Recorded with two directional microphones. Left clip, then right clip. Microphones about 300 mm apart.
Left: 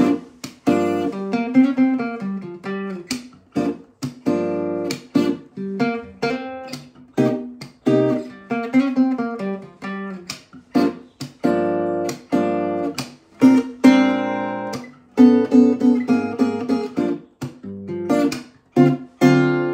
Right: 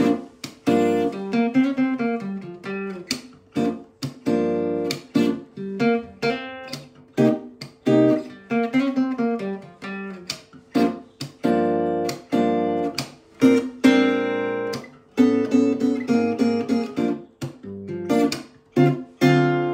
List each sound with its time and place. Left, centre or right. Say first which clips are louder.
0.0 s guitar: left 2 dB; centre